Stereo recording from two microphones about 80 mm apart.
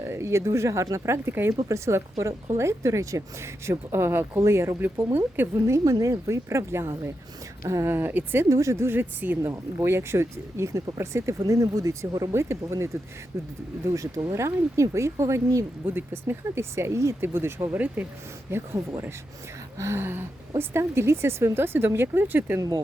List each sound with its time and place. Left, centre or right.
0.0 s a woman's voice: right
5.7 s a woman's voice: right
7.9 s speech: right
8.4 s a woman's voice: right
9.4 s a woman's voice: right
12.3 s a woman's voice: right
15.9 s a woman's voice: right
17.7 s speech: centre
18.5 s a woman's voice: right